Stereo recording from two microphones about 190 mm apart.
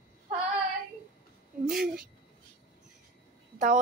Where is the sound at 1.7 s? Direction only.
50° right (ahead or behind).